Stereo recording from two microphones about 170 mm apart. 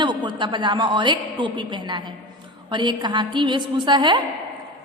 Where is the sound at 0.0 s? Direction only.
25° right (ahead or behind).